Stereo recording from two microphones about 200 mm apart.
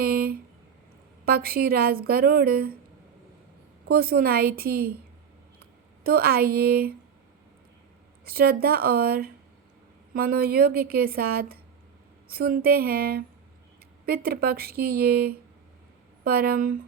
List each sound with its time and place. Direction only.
0.0 s a sound: 50° right (ahead or behind)
1.2 s a woman's voice: 50° right (ahead or behind)
3.8 s a woman's voice: 50° right (ahead or behind)
6.0 s a woman's voice: 50° right (ahead or behind)
8.2 s a woman's voice: 50° right (ahead or behind)